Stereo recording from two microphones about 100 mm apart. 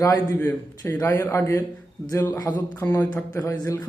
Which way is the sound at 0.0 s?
35° left (ahead or behind).